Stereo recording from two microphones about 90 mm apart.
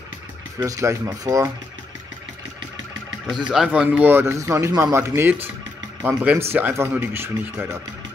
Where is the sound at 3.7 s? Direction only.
15° right (ahead or behind).